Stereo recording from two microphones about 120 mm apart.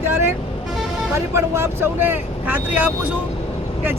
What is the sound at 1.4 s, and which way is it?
Speech, 20° right (ahead or behind).